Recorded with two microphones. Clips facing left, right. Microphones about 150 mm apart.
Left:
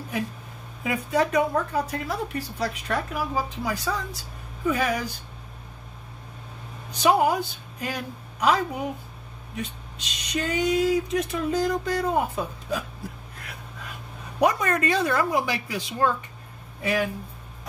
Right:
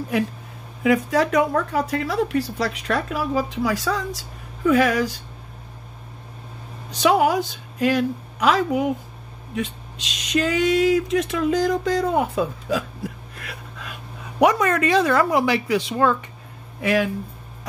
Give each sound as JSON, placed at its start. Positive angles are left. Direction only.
{"t": 0.8, "sound": "a woman's voice", "side_deg": -90}
{"t": 6.9, "sound": "a woman's voice", "side_deg": -90}
{"t": 13.4, "sound": "a sound", "side_deg": -85}
{"t": 14.4, "sound": "a woman's voice", "side_deg": -90}
{"t": 16.8, "sound": "a woman's voice", "side_deg": -90}